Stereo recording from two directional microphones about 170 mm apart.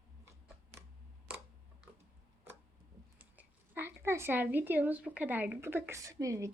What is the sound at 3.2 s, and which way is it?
Speech, 10° right (ahead or behind).